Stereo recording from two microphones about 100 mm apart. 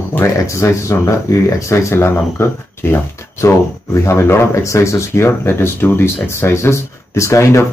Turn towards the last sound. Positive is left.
turn(degrees=30)  # may be behind; listen again after turning